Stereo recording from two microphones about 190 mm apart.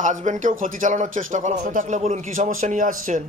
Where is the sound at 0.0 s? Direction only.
40° right (ahead or behind).